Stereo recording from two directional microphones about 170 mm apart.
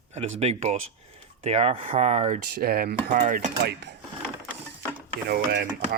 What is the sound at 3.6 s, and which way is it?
Speech, 80° right.